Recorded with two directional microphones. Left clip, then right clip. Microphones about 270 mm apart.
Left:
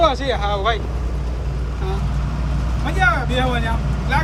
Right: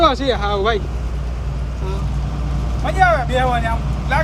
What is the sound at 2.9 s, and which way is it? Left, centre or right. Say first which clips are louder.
Speech: right 3 dB; centre.